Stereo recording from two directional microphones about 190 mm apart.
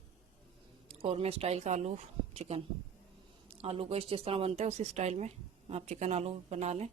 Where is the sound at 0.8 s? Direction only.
30° right (ahead or behind).